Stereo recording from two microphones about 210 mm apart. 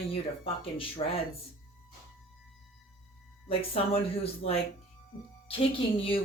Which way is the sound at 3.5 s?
25° left (ahead or behind).